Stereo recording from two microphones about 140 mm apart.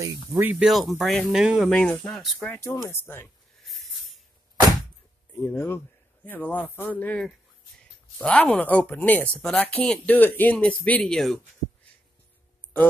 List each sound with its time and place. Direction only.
0.3 s speech: 15° right (ahead or behind)
0.7 s speech: centre (ahead or behind)
1.7 s speech: 10° left (ahead or behind)
2.4 s speech: 15° left (ahead or behind)
3.6 s a sound: centre (ahead or behind)
5.4 s speech: 15° left (ahead or behind)